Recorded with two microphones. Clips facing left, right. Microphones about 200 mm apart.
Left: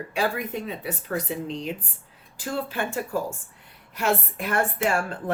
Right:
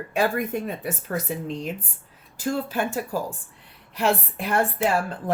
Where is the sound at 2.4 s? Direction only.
40° right (ahead or behind).